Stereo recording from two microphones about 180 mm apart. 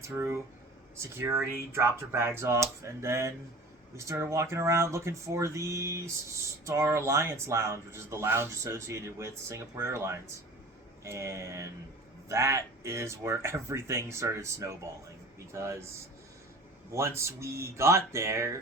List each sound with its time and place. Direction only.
0.0 s speech: 15° right (ahead or behind)
16.9 s speech: 15° right (ahead or behind)